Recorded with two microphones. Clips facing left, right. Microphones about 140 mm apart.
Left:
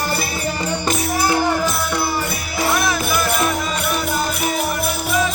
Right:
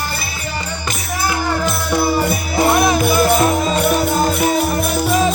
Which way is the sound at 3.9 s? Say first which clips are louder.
Right 5 dB; 40° right (ahead or behind).